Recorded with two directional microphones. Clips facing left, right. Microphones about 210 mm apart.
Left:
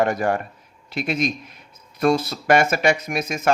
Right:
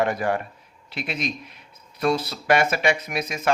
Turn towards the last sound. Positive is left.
turn(degrees=45)  # may be behind; listen again after turning